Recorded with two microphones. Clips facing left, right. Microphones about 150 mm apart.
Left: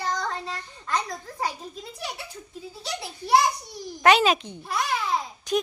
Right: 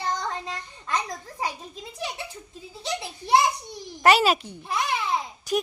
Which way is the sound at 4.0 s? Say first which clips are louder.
Even; 5° right (ahead or behind).